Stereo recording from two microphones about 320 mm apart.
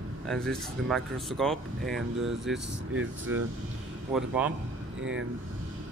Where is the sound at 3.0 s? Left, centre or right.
Right.